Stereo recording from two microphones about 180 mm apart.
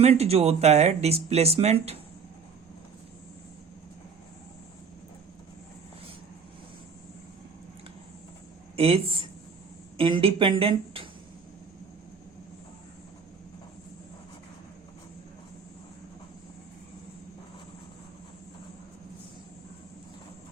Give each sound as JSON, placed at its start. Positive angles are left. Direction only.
{"t": 0.0, "sound": "speech", "side_deg": -35}
{"t": 8.7, "sound": "speech", "side_deg": -30}